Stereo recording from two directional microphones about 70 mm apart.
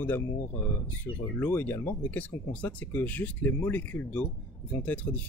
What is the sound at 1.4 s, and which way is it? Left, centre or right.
Speech, left.